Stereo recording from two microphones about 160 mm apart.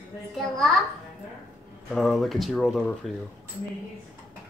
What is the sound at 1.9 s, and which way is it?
Speech, centre (ahead or behind).